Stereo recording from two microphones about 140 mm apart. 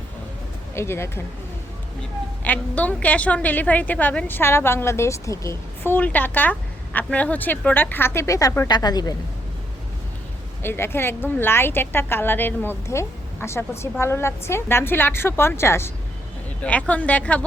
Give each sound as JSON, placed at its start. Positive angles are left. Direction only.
{"t": 0.7, "sound": "a woman's voice", "side_deg": 20}
{"t": 2.4, "sound": "a woman's voice", "side_deg": 10}
{"t": 10.6, "sound": "a woman's voice", "side_deg": 15}